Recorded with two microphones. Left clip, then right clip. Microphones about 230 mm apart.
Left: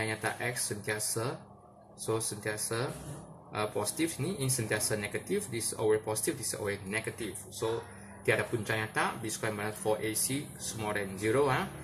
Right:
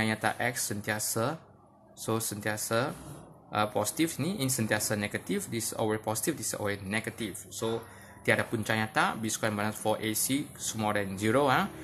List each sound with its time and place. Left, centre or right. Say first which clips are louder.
0.0 s speech: right 4 dB; right